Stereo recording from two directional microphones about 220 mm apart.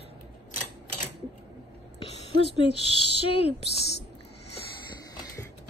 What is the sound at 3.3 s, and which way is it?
Speech, 25° left (ahead or behind).